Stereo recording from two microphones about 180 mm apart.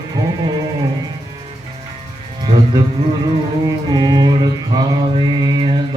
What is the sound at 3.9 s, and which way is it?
Music, 25° right (ahead or behind).